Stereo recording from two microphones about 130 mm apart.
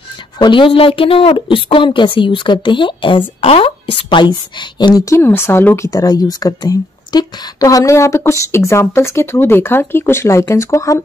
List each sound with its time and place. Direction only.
0.4 s a woman's voice: 40° left (ahead or behind)
5.1 s speech: 20° left (ahead or behind)
5.9 s speech: 30° left (ahead or behind)